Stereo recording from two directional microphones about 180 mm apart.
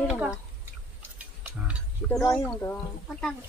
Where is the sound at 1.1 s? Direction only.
10° right (ahead or behind).